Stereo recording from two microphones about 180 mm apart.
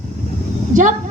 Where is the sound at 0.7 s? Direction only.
45° right (ahead or behind).